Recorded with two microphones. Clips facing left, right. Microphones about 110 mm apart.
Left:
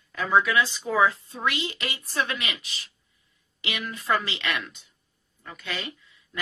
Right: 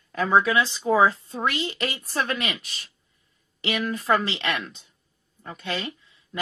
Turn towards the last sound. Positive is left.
turn(degrees=-30)  # may be behind; listen again after turning